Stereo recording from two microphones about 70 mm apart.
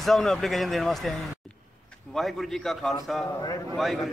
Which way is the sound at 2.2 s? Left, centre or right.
Centre.